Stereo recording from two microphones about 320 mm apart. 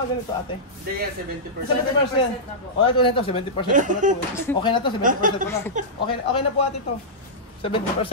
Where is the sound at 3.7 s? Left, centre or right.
Right.